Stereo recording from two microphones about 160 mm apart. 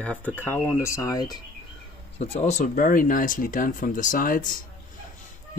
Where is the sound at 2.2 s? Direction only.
45° left (ahead or behind); by 4.6 s 60° left (ahead or behind).